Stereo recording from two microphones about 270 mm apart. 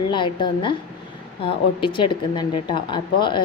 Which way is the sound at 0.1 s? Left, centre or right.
Centre.